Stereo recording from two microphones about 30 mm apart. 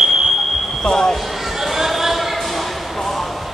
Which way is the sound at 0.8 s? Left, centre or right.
Left.